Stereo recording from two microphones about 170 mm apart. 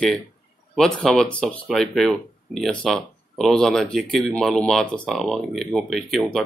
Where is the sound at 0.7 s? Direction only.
5° left (ahead or behind).